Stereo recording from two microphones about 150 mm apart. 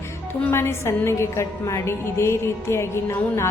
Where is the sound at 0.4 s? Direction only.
15° left (ahead or behind).